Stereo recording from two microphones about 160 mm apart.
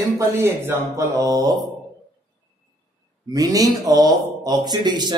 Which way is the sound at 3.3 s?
20° right (ahead or behind).